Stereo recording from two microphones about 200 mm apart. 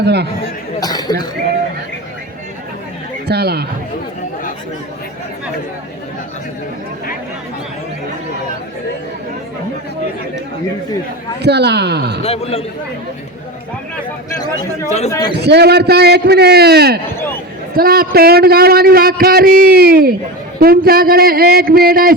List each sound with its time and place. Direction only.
0.0 s speech: 55° right (ahead or behind)
0.8 s chatter: 20° left (ahead or behind)
3.2 s a sound: 55° right (ahead or behind)
11.4 s speech: 55° right (ahead or behind)
12.2 s a man's voice: 30° left (ahead or behind)
14.8 s a man's voice: 35° left (ahead or behind)
15.4 s a man's voice: 55° right (ahead or behind)